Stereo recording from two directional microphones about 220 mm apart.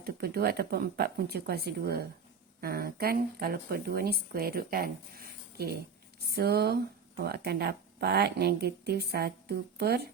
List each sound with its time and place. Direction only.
0.0 s speech: 45° right (ahead or behind)